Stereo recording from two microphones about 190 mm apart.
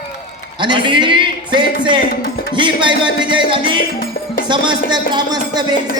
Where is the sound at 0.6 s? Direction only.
25° right (ahead or behind).